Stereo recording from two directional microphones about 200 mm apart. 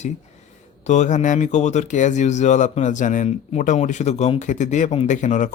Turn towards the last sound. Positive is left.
turn(degrees=40)  # may be behind; listen again after turning